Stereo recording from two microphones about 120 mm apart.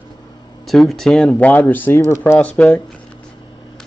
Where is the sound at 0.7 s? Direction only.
Centre (ahead or behind).